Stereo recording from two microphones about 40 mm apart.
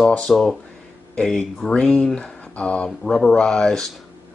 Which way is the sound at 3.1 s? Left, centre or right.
Centre.